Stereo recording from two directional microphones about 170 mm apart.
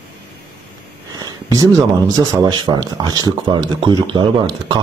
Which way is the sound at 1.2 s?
20° right (ahead or behind).